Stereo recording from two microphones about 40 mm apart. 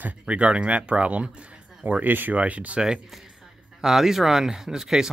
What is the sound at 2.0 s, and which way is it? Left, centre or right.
Speech, right.